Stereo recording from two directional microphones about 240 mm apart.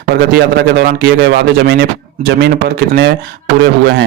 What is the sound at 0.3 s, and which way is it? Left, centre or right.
A man's voice, right.